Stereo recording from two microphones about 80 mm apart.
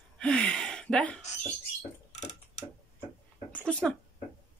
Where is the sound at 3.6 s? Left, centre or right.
Centre.